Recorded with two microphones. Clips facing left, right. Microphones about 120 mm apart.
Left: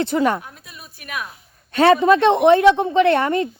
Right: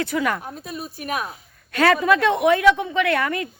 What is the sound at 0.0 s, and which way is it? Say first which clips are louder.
Speech: left 4 dB; 30° left (ahead or behind).